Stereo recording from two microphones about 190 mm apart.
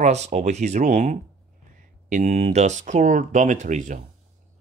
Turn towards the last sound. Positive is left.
turn(degrees=-40)  # may be behind; listen again after turning